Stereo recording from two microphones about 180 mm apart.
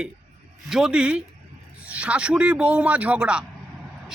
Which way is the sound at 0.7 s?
5° right (ahead or behind).